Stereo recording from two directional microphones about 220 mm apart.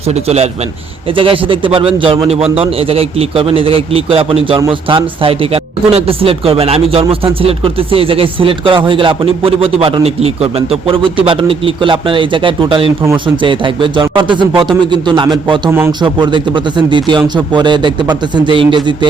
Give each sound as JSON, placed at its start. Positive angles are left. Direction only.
{"t": 0.1, "sound": "speech", "side_deg": -30}